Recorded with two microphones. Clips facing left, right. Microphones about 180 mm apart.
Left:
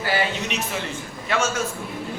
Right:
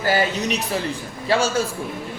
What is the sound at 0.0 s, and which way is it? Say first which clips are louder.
A man's voice: right 4 dB; 40° right (ahead or behind).